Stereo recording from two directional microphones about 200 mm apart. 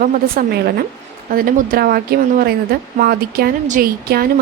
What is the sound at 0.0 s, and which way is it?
Speech, 50° right (ahead or behind).